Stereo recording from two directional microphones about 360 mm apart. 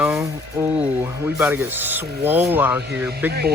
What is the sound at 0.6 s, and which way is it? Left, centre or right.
Speech, centre.